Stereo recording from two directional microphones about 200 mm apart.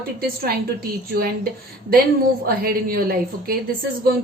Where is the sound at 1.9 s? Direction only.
50° right (ahead or behind).